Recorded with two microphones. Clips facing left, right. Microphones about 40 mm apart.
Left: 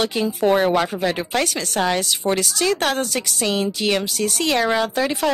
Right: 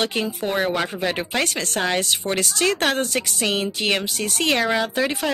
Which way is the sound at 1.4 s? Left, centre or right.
Right.